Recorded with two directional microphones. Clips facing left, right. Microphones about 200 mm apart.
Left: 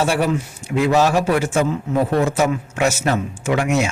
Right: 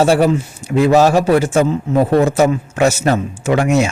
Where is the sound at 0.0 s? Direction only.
35° right (ahead or behind).